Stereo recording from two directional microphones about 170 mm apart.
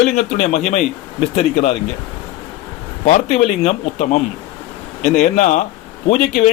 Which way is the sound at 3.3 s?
40° left (ahead or behind).